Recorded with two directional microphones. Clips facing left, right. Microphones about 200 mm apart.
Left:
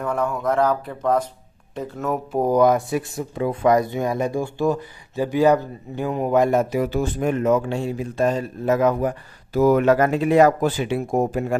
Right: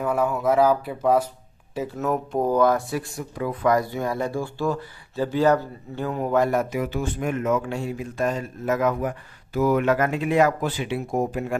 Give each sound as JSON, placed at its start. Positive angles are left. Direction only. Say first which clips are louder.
{"t": 0.0, "sound": "speech", "louder": "right 1 dB", "side_deg": -5}
{"t": 2.4, "sound": "speech", "louder": "left 4 dB", "side_deg": 15}